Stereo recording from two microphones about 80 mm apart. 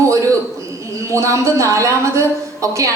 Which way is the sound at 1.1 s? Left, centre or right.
Right.